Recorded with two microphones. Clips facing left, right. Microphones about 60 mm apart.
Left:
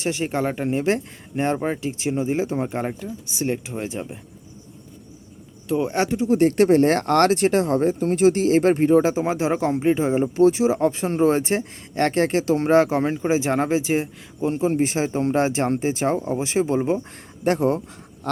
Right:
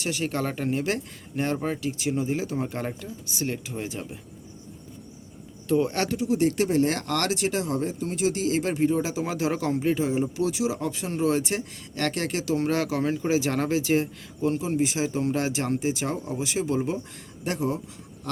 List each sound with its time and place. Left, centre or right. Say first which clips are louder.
0.0 s speech: left 4 dB; left
5.6 s speech: left 2 dB; centre
6.2 s speech: left 7 dB; left
9.1 s speech: left 5 dB; left
14.6 s speech: left 5 dB; left